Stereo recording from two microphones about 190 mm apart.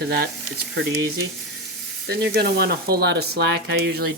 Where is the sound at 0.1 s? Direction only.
55° right (ahead or behind).